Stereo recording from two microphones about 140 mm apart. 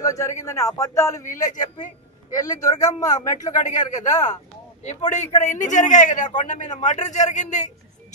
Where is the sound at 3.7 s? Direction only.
60° left (ahead or behind).